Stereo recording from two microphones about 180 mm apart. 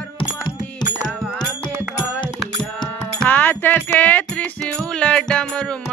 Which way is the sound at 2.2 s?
25° left (ahead or behind).